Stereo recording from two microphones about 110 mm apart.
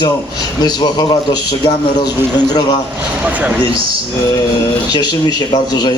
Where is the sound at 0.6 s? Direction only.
40° left (ahead or behind).